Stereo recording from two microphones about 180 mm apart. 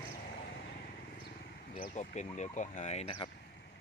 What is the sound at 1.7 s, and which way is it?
Speech, 45° left (ahead or behind).